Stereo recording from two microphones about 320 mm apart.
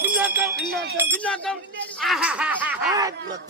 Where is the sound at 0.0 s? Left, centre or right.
Centre.